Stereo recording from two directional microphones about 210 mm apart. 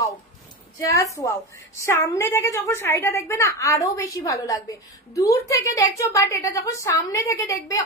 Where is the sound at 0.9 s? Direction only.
15° left (ahead or behind).